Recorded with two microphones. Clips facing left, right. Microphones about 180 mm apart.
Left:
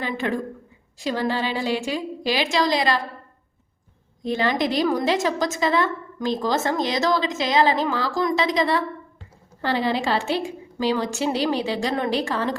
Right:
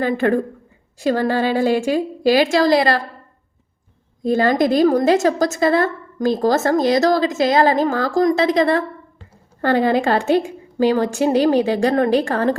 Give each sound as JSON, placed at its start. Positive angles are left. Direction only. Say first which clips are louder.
{"t": 0.0, "sound": "a woman's voice", "louder": "right 8 dB", "side_deg": -50}
{"t": 4.3, "sound": "a woman's voice", "louder": "right 7 dB", "side_deg": -45}